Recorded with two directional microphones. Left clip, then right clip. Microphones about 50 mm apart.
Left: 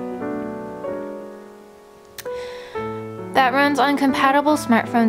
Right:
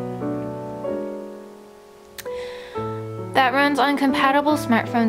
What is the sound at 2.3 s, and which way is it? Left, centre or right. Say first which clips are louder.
Speech: left 1 dB; centre.